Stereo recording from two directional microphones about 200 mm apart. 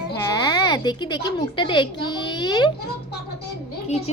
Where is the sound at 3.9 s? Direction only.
30° left (ahead or behind).